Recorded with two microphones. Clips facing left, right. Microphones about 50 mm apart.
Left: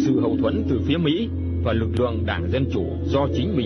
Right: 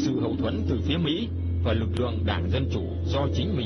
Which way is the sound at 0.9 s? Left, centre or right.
Left.